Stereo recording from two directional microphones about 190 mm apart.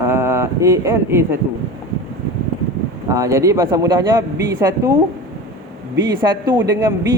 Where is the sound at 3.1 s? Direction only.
15° right (ahead or behind).